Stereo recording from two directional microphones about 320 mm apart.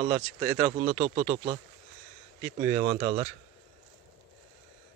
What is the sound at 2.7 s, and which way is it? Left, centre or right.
Speech, right.